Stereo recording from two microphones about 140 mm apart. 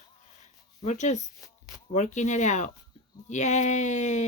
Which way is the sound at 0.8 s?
55° left (ahead or behind).